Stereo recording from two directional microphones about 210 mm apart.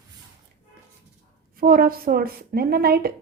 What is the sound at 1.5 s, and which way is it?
A woman's voice, 45° right (ahead or behind).